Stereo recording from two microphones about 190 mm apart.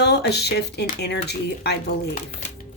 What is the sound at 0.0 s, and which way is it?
A woman's voice, 60° left (ahead or behind).